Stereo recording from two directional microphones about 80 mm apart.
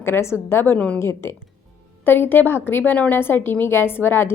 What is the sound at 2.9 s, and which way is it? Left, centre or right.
Speech, centre.